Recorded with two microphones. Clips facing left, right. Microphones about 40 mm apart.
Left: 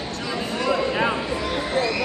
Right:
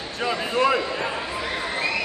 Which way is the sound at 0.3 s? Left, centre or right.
Right.